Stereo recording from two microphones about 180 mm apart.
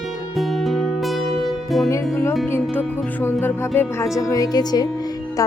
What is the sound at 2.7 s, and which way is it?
Speech, 10° left (ahead or behind).